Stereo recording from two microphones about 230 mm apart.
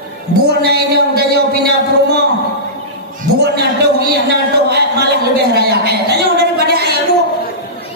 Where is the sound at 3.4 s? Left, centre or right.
Right.